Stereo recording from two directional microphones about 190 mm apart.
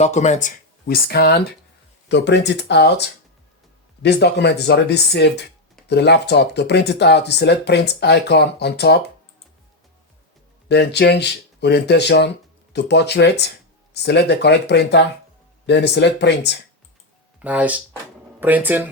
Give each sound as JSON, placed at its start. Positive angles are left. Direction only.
{"t": 0.0, "sound": "speech", "side_deg": 35}
{"t": 2.0, "sound": "speech", "side_deg": 65}
{"t": 10.7, "sound": "speech", "side_deg": 65}
{"t": 17.4, "sound": "speech", "side_deg": -5}